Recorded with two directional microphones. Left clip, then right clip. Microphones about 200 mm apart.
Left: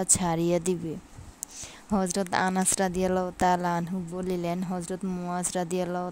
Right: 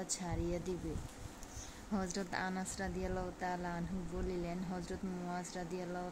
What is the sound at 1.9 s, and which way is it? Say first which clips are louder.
A woman's voice: left 13 dB; 45° left (ahead or behind).